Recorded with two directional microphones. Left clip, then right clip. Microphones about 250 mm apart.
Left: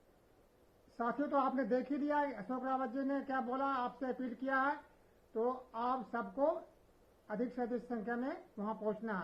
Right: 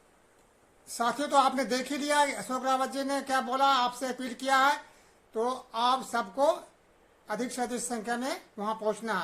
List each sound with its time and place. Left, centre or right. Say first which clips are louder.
0.9 s speech: right 10 dB; centre